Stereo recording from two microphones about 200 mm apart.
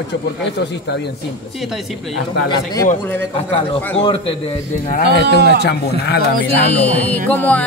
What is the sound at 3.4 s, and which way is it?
Speech, 30° left (ahead or behind).